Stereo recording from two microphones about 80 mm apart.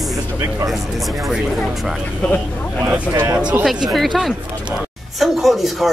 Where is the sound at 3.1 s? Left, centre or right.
Right.